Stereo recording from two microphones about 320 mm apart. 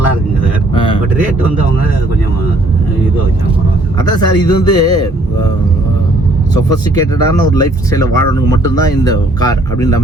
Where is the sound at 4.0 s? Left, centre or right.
Centre.